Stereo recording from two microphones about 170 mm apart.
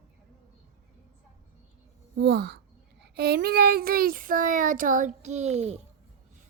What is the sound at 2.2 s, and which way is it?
A woman's voice, 70° right (ahead or behind).